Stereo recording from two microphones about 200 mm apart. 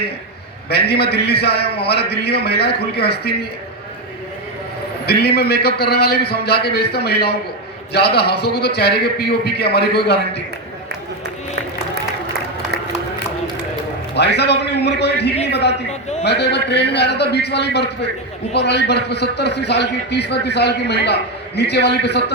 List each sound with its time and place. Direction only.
0.7 s a man's voice: 55° left (ahead or behind)
5.0 s a man's voice: 55° left (ahead or behind)
14.2 s a man's voice: 55° left (ahead or behind)